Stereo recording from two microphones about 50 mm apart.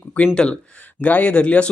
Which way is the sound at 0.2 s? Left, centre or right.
Left.